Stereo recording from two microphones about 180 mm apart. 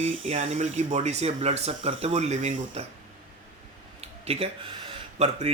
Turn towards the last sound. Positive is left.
turn(degrees=-35)  # may be behind; listen again after turning